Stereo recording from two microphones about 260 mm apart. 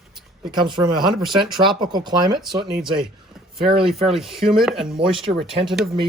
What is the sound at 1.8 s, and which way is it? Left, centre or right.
Speech, centre.